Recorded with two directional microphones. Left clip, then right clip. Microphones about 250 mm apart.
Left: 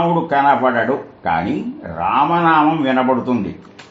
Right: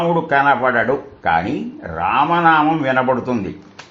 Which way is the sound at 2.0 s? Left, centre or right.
Right.